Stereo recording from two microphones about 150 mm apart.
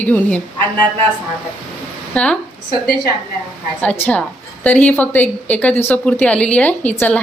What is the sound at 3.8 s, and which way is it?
A woman's voice, 10° left (ahead or behind).